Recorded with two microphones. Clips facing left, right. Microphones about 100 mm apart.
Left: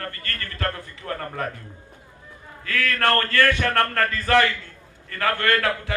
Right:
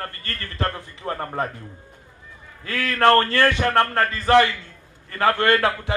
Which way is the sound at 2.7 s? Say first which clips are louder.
Right 5 dB; 25° right (ahead or behind).